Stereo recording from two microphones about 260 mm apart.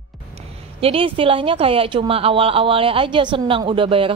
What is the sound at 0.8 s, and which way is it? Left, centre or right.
A woman's voice, right.